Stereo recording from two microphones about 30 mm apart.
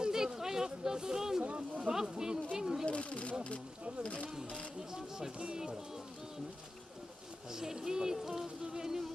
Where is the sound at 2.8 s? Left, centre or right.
Left.